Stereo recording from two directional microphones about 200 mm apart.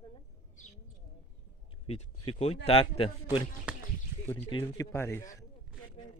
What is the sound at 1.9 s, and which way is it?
Speech, 30° left (ahead or behind).